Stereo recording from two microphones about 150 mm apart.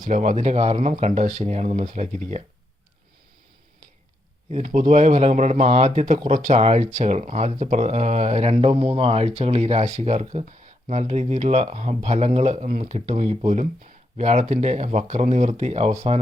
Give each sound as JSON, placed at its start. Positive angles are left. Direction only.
{"t": 0.0, "sound": "speech", "side_deg": -50}
{"t": 4.4, "sound": "speech", "side_deg": -50}
{"t": 6.6, "sound": "speech", "side_deg": -45}